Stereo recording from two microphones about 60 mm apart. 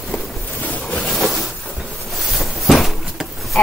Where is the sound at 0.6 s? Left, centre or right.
Left.